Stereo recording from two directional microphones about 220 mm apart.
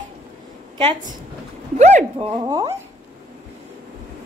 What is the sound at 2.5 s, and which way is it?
Speech, 20° right (ahead or behind).